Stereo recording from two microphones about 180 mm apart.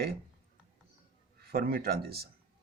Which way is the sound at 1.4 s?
60° right (ahead or behind).